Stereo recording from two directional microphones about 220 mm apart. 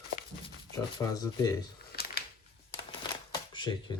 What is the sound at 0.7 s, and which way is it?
Speech, 15° left (ahead or behind).